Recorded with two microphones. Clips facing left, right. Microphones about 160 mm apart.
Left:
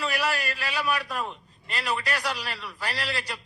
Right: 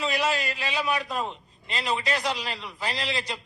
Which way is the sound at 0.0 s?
20° right (ahead or behind).